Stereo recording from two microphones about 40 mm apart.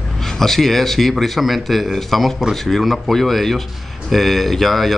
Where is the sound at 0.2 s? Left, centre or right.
Centre.